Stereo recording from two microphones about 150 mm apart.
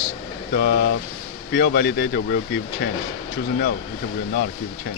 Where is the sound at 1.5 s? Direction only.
90° left.